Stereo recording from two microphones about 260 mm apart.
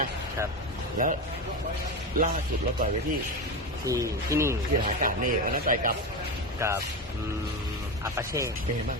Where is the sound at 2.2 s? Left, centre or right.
Right.